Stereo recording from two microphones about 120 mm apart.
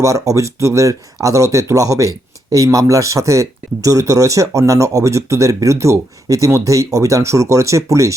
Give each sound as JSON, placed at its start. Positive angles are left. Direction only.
{"t": 0.0, "sound": "speech", "side_deg": -25}